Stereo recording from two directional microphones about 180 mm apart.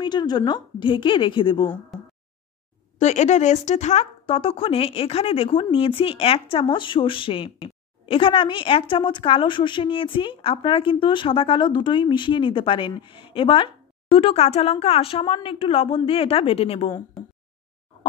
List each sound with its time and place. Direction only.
0.0 s speech: 25° left (ahead or behind)
3.0 s speech: 40° left (ahead or behind)